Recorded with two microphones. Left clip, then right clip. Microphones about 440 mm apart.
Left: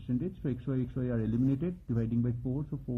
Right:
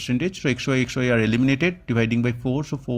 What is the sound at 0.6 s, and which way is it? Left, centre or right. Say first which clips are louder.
Speech: right 13 dB; right.